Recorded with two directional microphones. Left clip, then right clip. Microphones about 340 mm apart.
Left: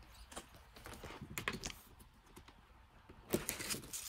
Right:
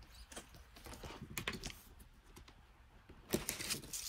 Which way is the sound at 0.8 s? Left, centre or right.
Centre.